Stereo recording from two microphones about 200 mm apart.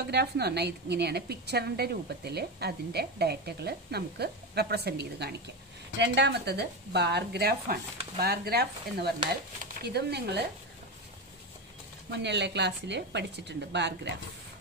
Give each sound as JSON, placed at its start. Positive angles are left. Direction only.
{"t": 0.0, "sound": "a woman's voice", "side_deg": -55}
{"t": 12.1, "sound": "a woman's voice", "side_deg": -60}